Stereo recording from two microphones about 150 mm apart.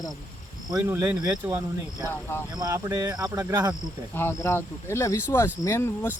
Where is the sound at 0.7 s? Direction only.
20° right (ahead or behind).